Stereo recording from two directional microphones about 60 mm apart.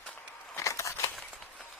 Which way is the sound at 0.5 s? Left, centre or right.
Left.